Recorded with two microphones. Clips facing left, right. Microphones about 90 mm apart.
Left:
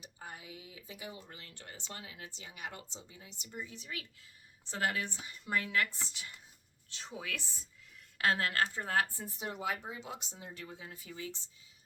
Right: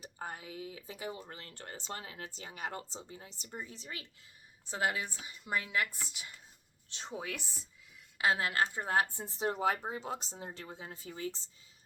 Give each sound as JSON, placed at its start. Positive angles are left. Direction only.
{"t": 0.0, "sound": "speech", "side_deg": -40}
{"t": 4.6, "sound": "speech", "side_deg": -15}
{"t": 6.9, "sound": "a woman's voice", "side_deg": -25}
{"t": 8.2, "sound": "a woman's voice", "side_deg": -10}